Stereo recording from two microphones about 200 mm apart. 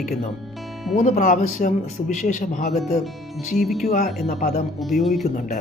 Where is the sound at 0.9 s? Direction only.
35° left (ahead or behind).